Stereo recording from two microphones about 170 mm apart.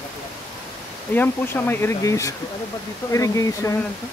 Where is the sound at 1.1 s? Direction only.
10° left (ahead or behind).